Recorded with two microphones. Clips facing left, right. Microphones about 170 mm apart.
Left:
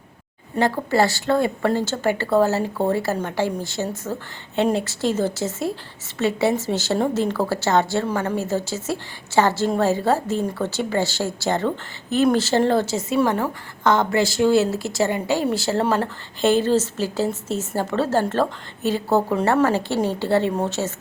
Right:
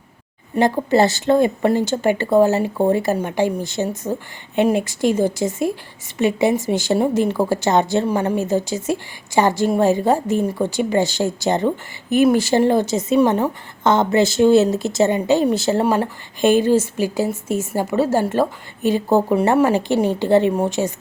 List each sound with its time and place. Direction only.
0.5 s a woman's voice: 15° right (ahead or behind)